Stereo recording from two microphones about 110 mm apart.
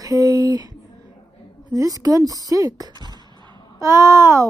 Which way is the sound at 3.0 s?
40° left (ahead or behind).